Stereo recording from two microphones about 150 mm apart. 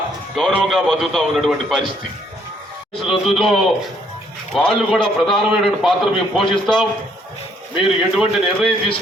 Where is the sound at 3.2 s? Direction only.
Centre (ahead or behind).